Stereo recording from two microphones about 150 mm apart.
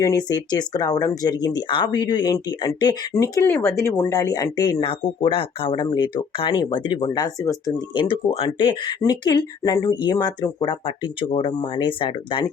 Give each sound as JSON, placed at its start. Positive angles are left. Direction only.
{"t": 0.0, "sound": "speech", "side_deg": 25}